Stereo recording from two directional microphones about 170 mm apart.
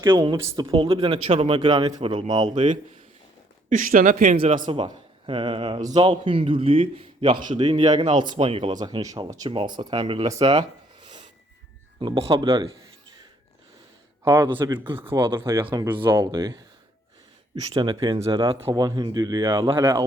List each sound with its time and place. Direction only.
0.0 s speech: 25° right (ahead or behind)
3.7 s a man's voice: 50° right (ahead or behind)
4.6 s a man's voice: 25° right (ahead or behind)
8.7 s speech: 25° right (ahead or behind)
14.3 s speech: 15° right (ahead or behind)
14.5 s a man's voice: 25° right (ahead or behind)
15.4 s speech: 15° right (ahead or behind)